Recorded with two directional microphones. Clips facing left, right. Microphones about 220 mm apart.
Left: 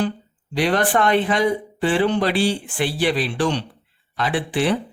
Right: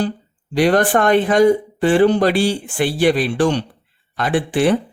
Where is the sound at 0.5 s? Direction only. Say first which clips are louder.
Right 5 dB; 45° right (ahead or behind).